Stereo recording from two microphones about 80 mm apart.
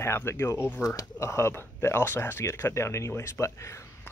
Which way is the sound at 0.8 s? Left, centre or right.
Left.